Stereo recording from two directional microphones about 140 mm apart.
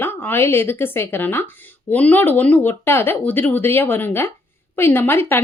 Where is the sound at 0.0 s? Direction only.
15° left (ahead or behind).